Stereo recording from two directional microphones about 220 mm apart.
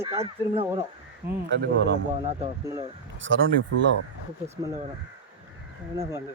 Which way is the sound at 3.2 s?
60° right (ahead or behind).